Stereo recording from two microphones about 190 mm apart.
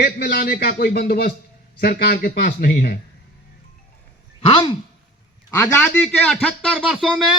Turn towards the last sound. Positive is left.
turn(degrees=0)  # may be behind; listen again after turning